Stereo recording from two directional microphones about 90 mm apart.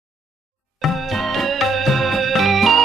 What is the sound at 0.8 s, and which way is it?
Music, centre (ahead or behind).